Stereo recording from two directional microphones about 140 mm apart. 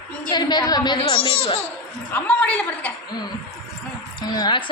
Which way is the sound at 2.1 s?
10° left (ahead or behind).